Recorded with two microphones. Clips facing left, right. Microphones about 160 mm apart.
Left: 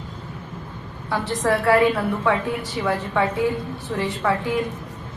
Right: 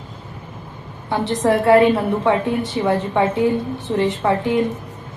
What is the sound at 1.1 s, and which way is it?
A woman's voice, 20° right (ahead or behind).